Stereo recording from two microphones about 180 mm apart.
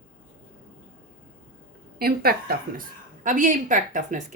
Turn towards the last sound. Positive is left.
turn(degrees=-45)  # may be behind; listen again after turning